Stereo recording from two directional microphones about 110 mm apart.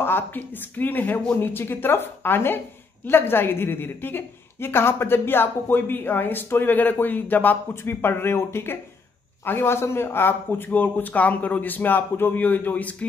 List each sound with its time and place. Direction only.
0.0 s a woman's voice: 20° left (ahead or behind)